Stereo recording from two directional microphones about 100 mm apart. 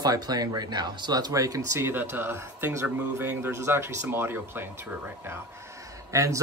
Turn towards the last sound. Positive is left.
turn(degrees=-30)  # may be behind; listen again after turning